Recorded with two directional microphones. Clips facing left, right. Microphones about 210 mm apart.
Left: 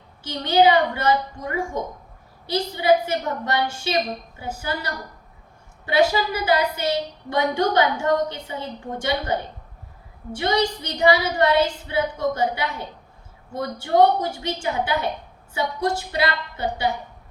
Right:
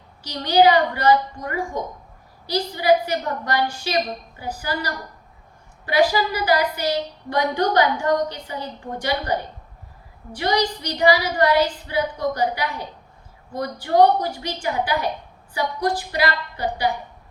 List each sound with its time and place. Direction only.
0.2 s a woman's voice: 25° left (ahead or behind)
10.3 s a woman's voice: 25° left (ahead or behind)